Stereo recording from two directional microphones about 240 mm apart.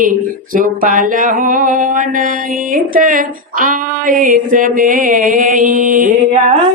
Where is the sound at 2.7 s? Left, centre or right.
Right.